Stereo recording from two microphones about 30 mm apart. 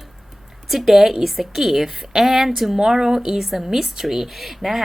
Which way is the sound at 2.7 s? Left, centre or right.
Centre.